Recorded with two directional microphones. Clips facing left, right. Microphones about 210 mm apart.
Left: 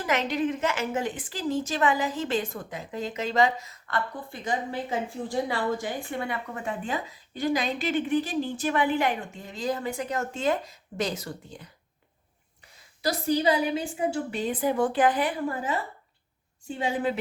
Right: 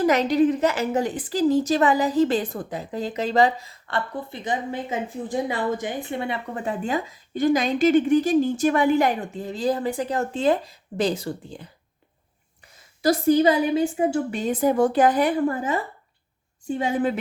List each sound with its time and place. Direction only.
0.0 s a woman's voice: 40° right (ahead or behind)
13.0 s a woman's voice: 50° right (ahead or behind)